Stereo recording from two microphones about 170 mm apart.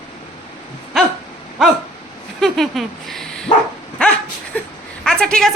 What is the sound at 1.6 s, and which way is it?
Dog, centre (ahead or behind).